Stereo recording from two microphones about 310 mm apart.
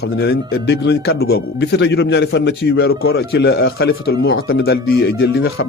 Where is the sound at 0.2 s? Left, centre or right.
Left.